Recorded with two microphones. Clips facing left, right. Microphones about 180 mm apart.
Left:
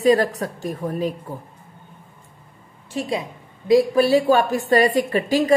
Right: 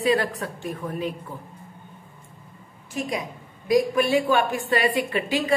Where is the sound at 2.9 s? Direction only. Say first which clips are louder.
Left 3 dB; 30° left (ahead or behind).